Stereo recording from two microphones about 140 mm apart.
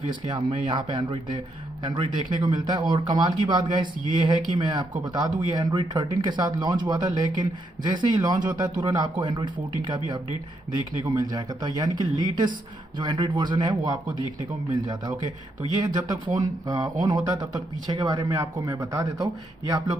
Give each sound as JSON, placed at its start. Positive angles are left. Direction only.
{"t": 0.1, "sound": "a man's voice", "side_deg": -35}
{"t": 16.3, "sound": "a man's voice", "side_deg": -25}